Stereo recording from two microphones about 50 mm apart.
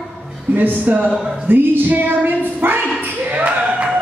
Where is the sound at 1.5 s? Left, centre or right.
Right.